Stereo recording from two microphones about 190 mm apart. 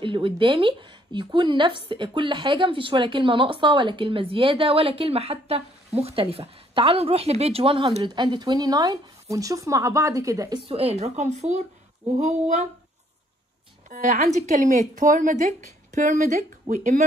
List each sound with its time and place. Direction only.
0.0 s a woman's voice: 25° right (ahead or behind)
10.6 s speech: 30° right (ahead or behind)
13.8 s speech: 40° right (ahead or behind)